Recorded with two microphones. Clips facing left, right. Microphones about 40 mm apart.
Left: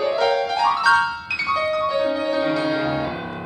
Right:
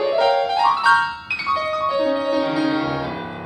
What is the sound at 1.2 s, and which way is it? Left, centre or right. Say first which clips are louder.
Music: right 1 dB; centre.